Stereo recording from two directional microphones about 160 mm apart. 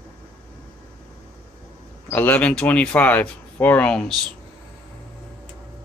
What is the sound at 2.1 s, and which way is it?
Speech, 10° left (ahead or behind).